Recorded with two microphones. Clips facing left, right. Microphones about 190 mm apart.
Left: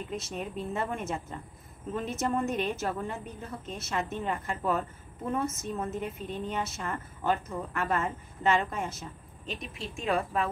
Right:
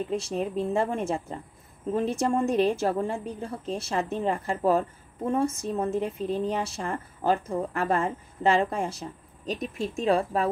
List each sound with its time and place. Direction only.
0.1 s a woman's voice: 30° right (ahead or behind)